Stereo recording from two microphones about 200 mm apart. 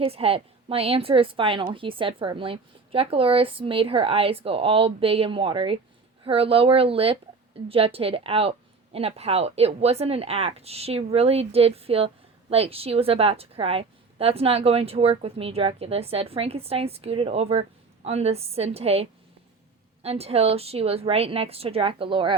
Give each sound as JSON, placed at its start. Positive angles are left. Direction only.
{"t": 0.0, "sound": "a woman's voice", "side_deg": -30}